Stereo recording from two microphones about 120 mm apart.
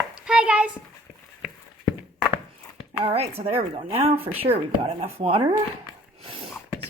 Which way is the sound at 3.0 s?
55° right (ahead or behind).